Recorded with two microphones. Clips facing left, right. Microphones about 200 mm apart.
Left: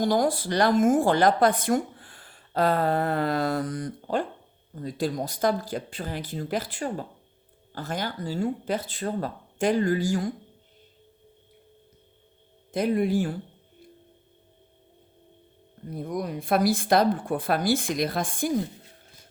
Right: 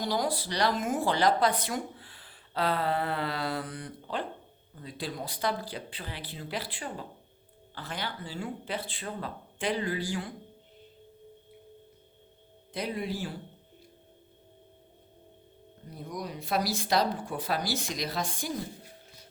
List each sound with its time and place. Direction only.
0.0 s speech: 50° left (ahead or behind)
12.7 s speech: 50° left (ahead or behind)
15.9 s speech: 55° left (ahead or behind)